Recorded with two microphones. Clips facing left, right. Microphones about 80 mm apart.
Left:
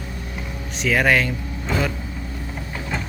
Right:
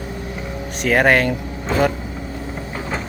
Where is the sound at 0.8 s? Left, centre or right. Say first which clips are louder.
Right 3 dB; right.